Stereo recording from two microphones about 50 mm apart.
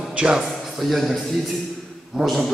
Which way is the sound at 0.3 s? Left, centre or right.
Centre.